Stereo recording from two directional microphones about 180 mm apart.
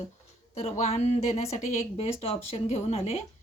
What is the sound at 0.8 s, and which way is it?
Speech, 35° left (ahead or behind).